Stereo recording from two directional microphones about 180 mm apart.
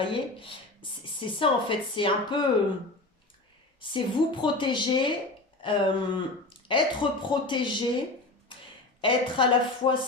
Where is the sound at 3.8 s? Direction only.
25° left (ahead or behind).